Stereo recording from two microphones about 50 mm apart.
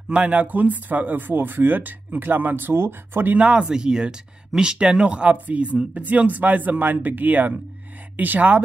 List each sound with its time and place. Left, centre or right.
0.1 s speech: right
3.3 s speech: right